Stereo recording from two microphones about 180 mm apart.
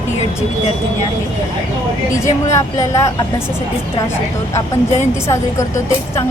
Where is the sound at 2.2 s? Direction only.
15° left (ahead or behind).